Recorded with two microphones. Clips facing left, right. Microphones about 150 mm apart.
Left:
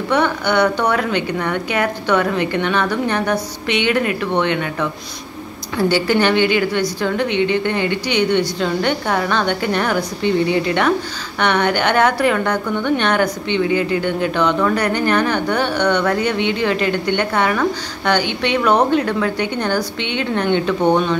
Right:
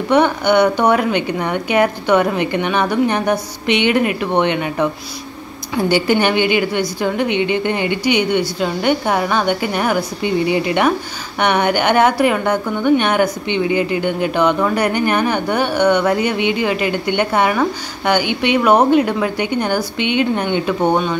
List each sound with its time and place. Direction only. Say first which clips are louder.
0.1 s a woman's voice: right 4 dB; 15° right (ahead or behind)